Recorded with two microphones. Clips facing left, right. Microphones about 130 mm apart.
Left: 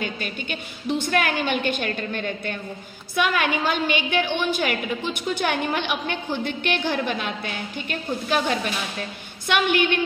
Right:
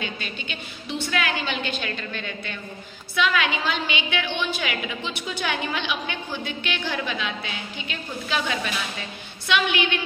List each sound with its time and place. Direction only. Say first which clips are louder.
0.0 s a woman's voice: left 3 dB; 50° left (ahead or behind)